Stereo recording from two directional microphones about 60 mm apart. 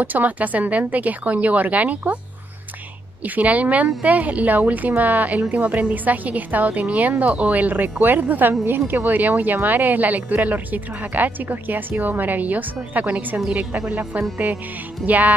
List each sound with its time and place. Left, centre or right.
0.0 s a woman's voice: right
3.3 s a woman's voice: right
15.0 s a woman's voice: right